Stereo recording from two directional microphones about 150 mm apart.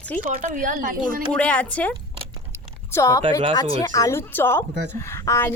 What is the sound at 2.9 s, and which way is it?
A woman's voice, 20° left (ahead or behind).